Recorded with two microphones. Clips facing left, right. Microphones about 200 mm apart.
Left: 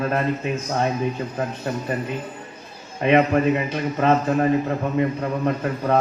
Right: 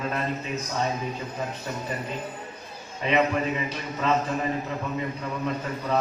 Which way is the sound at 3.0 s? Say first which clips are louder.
Left 7 dB; 55° left (ahead or behind).